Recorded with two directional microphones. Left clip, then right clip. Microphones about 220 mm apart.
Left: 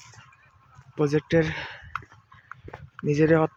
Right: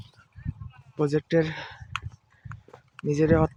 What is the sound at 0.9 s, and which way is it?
Speech, 5° right (ahead or behind).